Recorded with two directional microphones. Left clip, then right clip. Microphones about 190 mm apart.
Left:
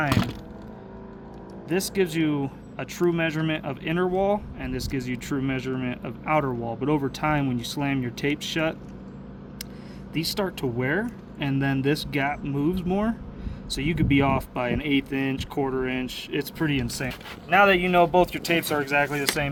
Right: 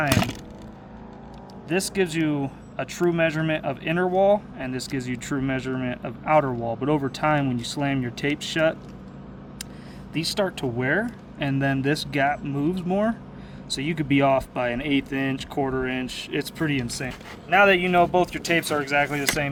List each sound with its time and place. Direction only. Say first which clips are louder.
0.1 s speech: right 3 dB; 50° right (ahead or behind)
1.7 s speech: right 1 dB; 10° right (ahead or behind)
10.2 s speech: right 2 dB; 10° right (ahead or behind); by 17.1 s 10° left (ahead or behind)
17.5 s speech: right 1 dB; 5° right (ahead or behind)